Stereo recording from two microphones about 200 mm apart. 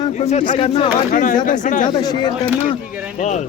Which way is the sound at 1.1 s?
40° left (ahead or behind).